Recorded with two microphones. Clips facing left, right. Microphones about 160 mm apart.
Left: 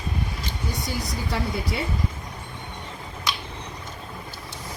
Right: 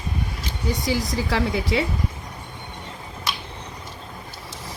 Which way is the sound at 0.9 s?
90° right.